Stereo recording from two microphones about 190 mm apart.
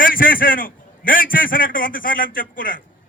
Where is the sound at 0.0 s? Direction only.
45° left (ahead or behind).